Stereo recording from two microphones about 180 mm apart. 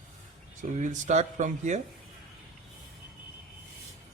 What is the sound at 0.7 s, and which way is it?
Speech, 40° right (ahead or behind).